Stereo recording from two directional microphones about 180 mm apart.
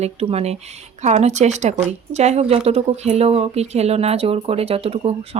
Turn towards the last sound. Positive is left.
turn(degrees=-35)  # may be behind; listen again after turning